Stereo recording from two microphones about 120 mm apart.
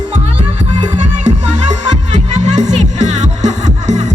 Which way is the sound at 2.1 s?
75° right (ahead or behind).